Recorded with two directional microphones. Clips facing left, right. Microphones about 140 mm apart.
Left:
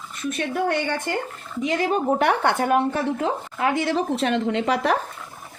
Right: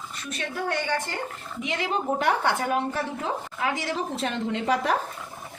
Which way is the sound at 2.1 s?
65° left (ahead or behind).